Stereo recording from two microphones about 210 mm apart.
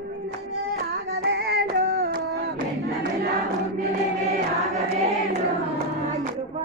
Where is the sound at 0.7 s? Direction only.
45° right (ahead or behind).